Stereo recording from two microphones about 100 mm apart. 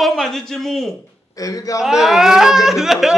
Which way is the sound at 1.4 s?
35° left (ahead or behind).